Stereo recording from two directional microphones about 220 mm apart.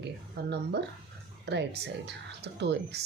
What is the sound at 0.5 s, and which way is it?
Speech, 50° right (ahead or behind).